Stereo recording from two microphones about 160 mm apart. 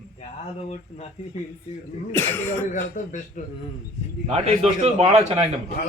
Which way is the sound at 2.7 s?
55° left (ahead or behind).